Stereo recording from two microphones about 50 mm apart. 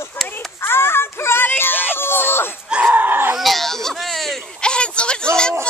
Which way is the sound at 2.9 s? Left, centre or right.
Right.